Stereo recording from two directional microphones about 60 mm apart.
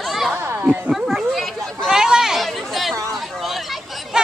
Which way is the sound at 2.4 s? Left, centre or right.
Centre.